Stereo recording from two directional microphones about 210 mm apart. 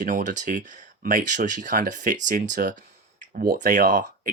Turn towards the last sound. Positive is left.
turn(degrees=-40)  # may be behind; listen again after turning